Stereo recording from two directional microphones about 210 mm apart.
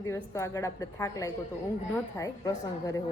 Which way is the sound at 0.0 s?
15° left (ahead or behind).